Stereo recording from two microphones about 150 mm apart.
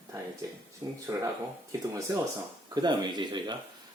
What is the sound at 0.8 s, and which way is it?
Speech, 30° right (ahead or behind).